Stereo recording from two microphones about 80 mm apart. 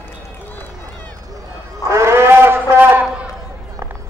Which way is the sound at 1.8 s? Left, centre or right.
Right.